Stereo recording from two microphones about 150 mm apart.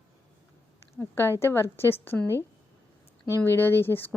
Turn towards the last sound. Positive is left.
turn(degrees=15)  # may be behind; listen again after turning